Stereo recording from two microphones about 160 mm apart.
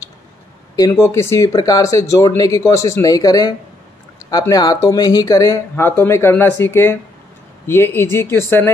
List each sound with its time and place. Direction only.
0.7 s speech: 20° left (ahead or behind)